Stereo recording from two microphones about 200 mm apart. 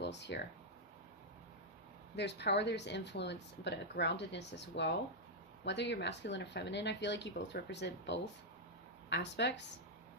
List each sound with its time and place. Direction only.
0.0 s speech: 60° left (ahead or behind)
2.1 s speech: 60° left (ahead or behind)